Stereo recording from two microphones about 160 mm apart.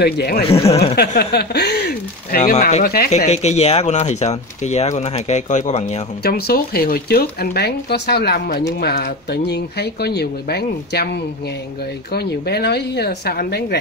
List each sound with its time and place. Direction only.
0.0 s speech: 80° left
0.5 s speech: 40° left (ahead or behind)
0.9 s speech: 90° left; by 2.8 s 50° left (ahead or behind)
2.8 s speech: 65° left (ahead or behind)
3.3 s speech: 45° left (ahead or behind)
6.2 s speech: 75° left (ahead or behind)